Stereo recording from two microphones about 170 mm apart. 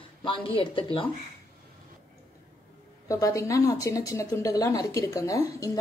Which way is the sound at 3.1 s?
20° left (ahead or behind).